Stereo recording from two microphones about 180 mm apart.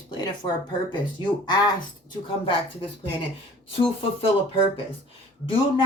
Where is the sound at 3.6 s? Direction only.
30° left (ahead or behind).